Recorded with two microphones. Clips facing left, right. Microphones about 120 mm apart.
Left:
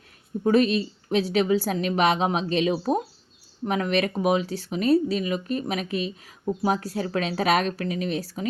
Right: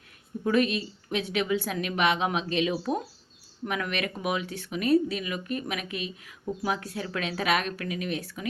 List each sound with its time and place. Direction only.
0.4 s speech: 35° left (ahead or behind)